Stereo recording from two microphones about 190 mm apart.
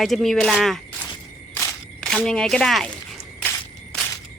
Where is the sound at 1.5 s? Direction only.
15° left (ahead or behind).